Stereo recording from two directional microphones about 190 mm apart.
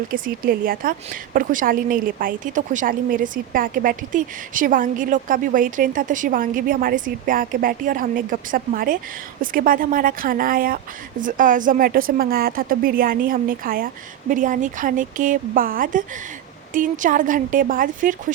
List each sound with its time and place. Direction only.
0.1 s a woman's voice: 50° right (ahead or behind)